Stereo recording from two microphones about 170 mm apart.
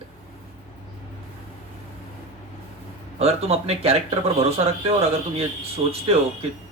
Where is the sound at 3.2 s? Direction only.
35° right (ahead or behind).